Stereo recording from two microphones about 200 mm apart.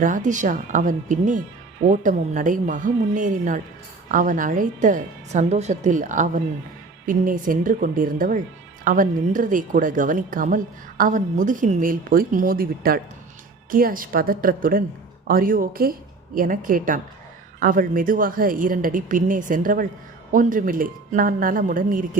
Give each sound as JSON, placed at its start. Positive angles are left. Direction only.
{"t": 0.0, "sound": "a woman's voice", "side_deg": -40}